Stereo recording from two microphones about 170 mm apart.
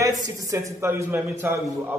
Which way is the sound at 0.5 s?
15° right (ahead or behind).